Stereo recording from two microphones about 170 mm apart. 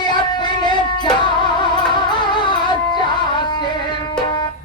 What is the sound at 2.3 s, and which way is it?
Music, 25° left (ahead or behind).